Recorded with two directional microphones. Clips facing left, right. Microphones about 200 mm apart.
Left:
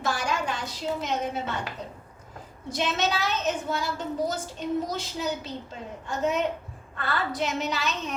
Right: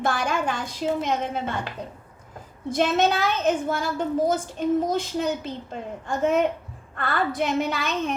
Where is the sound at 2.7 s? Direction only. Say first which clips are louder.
Right 6 dB; 55° right (ahead or behind).